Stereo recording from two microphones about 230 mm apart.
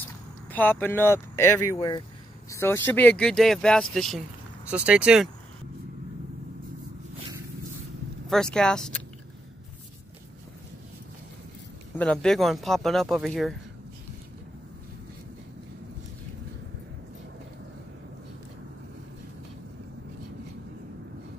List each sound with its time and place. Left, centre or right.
0.5 s speech: centre
8.3 s speech: centre
12.0 s speech: centre